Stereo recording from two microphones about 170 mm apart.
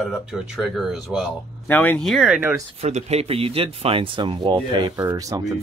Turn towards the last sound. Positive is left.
turn(degrees=-20)  # may be behind; listen again after turning